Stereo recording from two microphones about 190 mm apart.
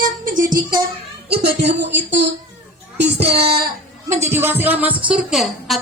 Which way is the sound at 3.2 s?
30° right (ahead or behind).